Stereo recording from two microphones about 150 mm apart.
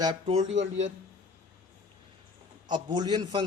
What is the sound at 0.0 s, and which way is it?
Speech, 30° right (ahead or behind).